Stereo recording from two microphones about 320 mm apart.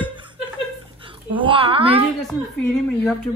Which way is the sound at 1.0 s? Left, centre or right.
Centre.